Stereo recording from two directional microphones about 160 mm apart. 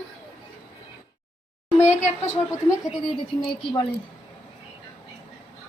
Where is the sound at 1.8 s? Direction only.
20° left (ahead or behind).